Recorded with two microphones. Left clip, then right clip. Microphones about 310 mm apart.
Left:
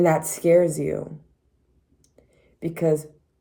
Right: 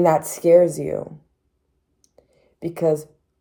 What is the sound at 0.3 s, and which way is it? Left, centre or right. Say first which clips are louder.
Speech: right 5 dB; centre.